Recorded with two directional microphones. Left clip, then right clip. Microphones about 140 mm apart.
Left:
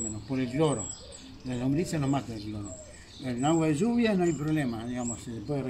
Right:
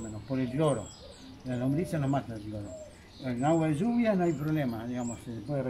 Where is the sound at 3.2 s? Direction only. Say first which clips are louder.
Left 1 dB; 10° right (ahead or behind).